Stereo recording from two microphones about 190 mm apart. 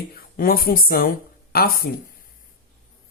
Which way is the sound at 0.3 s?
50° left (ahead or behind).